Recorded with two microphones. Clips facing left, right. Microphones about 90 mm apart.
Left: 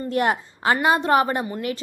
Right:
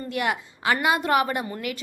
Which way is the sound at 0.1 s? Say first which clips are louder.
Left 5 dB; 40° left (ahead or behind).